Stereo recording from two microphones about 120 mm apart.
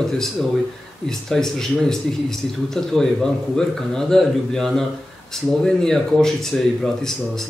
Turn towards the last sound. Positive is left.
turn(degrees=5)  # may be behind; listen again after turning